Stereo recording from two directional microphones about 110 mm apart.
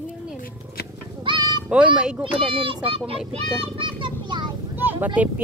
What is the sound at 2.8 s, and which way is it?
Children playing, 60° right (ahead or behind).